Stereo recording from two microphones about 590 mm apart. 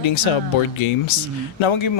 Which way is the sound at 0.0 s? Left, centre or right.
Left.